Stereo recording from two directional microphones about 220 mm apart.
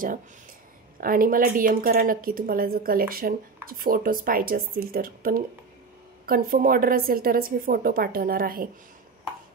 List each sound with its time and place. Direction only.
1.0 s a woman's voice: 40° right (ahead or behind)